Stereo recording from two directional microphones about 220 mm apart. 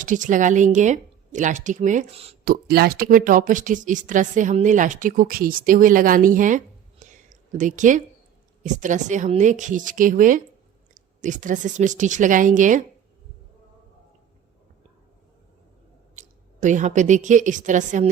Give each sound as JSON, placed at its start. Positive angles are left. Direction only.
{"t": 0.0, "sound": "speech", "side_deg": -35}
{"t": 2.4, "sound": "speech", "side_deg": -40}
{"t": 7.0, "sound": "a sound", "side_deg": -35}
{"t": 8.6, "sound": "speech", "side_deg": -35}
{"t": 16.1, "sound": "a woman's voice", "side_deg": -35}